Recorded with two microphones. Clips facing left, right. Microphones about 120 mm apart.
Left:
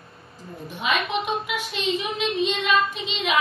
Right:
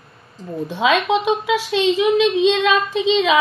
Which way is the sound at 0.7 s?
90° right.